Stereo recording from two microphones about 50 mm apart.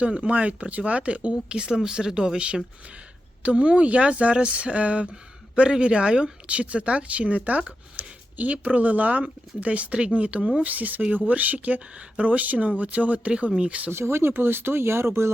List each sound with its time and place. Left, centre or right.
0.0 s speech: right
7.9 s a sound: right
8.6 s speech: right
13.9 s speech: right